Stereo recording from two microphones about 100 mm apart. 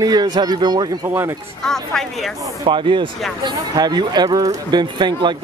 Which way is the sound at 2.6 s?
55° right (ahead or behind).